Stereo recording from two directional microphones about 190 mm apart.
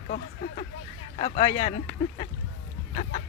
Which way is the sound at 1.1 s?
35° left (ahead or behind).